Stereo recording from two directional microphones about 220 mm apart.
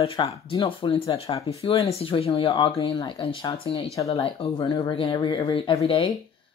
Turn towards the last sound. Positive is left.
turn(degrees=25)  # may be behind; listen again after turning